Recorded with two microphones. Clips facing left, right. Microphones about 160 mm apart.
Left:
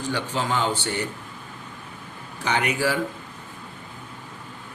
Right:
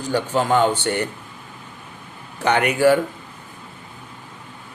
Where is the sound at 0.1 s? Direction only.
50° right (ahead or behind).